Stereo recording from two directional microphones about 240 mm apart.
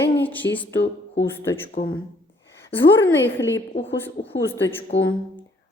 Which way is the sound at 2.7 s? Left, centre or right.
Centre.